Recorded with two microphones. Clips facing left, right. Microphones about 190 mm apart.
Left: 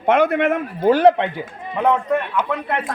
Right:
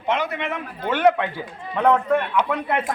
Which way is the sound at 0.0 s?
55° left (ahead or behind).